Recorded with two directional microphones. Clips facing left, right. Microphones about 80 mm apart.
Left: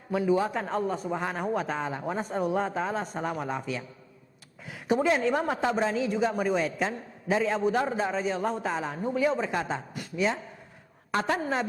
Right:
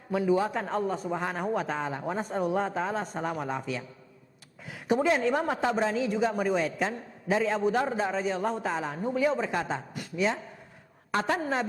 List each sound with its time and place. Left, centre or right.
0.1 s a man's voice: left
4.9 s a man's voice: left